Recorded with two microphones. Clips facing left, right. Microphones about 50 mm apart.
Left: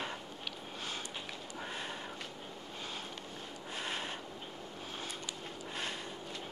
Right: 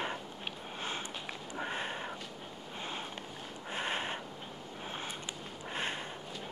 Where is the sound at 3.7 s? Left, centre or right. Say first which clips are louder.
Right 4 dB; right.